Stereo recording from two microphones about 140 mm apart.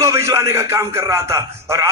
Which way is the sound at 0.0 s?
20° right (ahead or behind).